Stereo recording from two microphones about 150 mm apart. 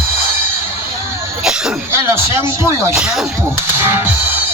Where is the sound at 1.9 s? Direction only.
15° right (ahead or behind).